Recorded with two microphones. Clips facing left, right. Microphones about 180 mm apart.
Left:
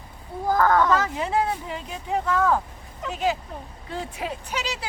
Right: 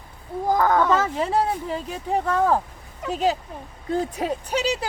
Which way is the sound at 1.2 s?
35° right (ahead or behind).